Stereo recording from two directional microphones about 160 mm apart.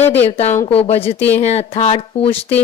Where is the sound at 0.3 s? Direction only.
40° left (ahead or behind).